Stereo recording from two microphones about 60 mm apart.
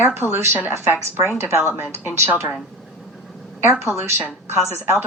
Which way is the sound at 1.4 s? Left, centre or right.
Right.